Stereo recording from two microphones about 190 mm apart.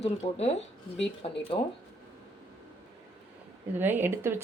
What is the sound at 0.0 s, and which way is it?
Speech, 35° left (ahead or behind).